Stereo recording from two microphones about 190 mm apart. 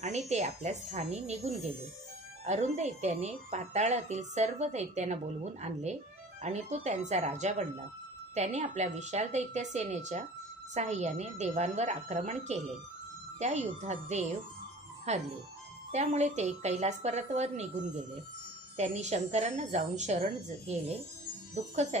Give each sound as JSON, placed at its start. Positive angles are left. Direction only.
{"t": 0.0, "sound": "a woman's voice", "side_deg": -35}
{"t": 18.8, "sound": "a woman's voice", "side_deg": -35}